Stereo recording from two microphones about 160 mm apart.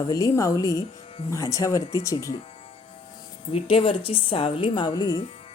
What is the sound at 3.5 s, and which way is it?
A woman's voice, 35° left (ahead or behind).